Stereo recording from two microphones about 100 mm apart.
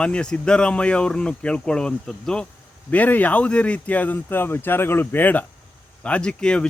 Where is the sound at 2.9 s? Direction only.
15° left (ahead or behind).